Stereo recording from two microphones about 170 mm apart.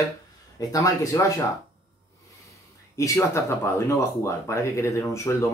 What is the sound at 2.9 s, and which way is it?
Speech, 20° left (ahead or behind).